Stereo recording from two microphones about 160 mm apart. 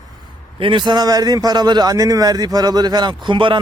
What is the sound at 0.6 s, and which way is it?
A man's voice, 30° right (ahead or behind).